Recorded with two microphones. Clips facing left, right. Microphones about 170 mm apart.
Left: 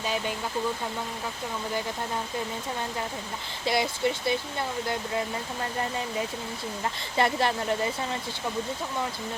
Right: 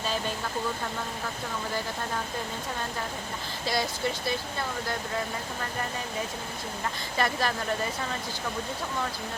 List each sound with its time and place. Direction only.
3.7 s speech: 20° left (ahead or behind)
7.2 s speech: 25° left (ahead or behind)